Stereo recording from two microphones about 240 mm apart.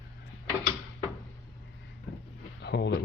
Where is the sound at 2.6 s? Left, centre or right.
Left.